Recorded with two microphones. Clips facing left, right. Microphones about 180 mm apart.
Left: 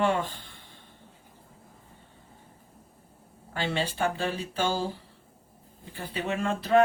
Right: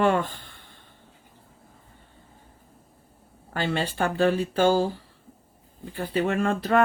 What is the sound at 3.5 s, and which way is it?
Speech, 55° right (ahead or behind).